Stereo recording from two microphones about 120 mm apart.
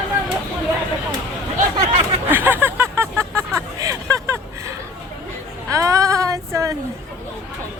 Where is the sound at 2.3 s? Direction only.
15° right (ahead or behind).